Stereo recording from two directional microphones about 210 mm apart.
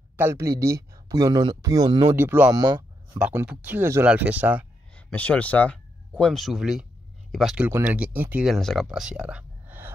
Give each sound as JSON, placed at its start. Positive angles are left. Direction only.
{"t": 0.2, "sound": "speech", "side_deg": -15}
{"t": 2.1, "sound": "speech", "side_deg": -10}
{"t": 4.9, "sound": "speech", "side_deg": 5}